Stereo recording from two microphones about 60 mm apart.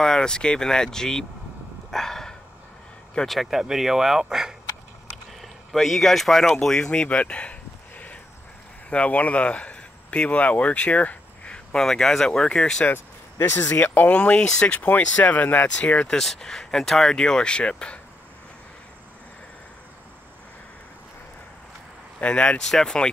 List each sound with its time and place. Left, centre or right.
0.0 s speech: centre
1.9 s dog: centre
3.3 s speech: centre
8.9 s speech: left
12.9 s vehicle: left
13.7 s speech: left
14.8 s speech: left
16.2 s speech: centre
22.2 s speech: centre